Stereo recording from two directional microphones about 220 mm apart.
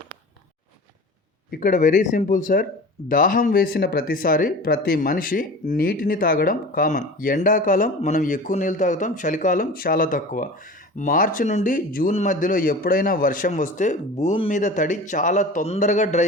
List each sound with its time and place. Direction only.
1.5 s speech: 40° left (ahead or behind)